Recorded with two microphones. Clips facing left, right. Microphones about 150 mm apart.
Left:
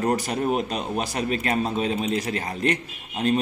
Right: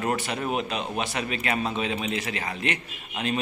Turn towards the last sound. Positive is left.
turn(degrees=40)  # may be behind; listen again after turning